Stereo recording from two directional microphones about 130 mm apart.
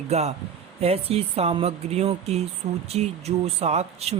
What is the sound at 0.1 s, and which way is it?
Speech, 55° right (ahead or behind).